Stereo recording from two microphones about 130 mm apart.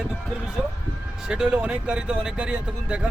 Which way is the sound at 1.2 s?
5° right (ahead or behind).